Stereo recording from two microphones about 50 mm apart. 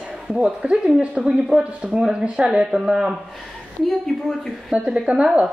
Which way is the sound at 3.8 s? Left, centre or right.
Centre.